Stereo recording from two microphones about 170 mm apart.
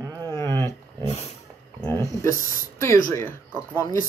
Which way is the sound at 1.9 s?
15° left (ahead or behind).